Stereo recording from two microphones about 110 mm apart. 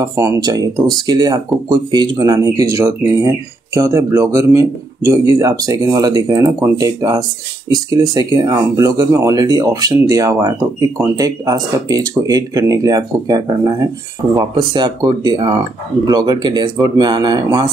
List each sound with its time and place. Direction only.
0.0 s speech: 30° right (ahead or behind)